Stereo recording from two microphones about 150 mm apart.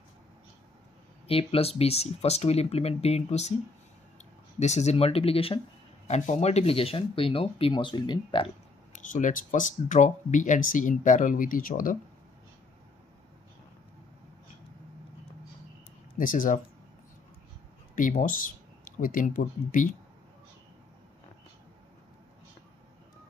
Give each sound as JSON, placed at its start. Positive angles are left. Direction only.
{"t": 1.2, "sound": "speech", "side_deg": 40}
{"t": 4.6, "sound": "speech", "side_deg": 50}
{"t": 6.0, "sound": "speech", "side_deg": 50}
{"t": 8.9, "sound": "speech", "side_deg": 55}
{"t": 16.2, "sound": "speech", "side_deg": 65}
{"t": 17.9, "sound": "speech", "side_deg": 65}